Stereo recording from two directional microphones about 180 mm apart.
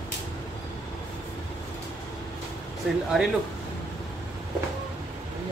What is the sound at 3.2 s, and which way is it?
Speech, centre (ahead or behind).